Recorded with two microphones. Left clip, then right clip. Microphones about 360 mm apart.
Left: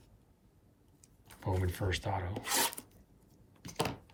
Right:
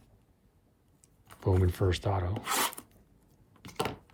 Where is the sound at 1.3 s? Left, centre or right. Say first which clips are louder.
Right 7 dB; centre.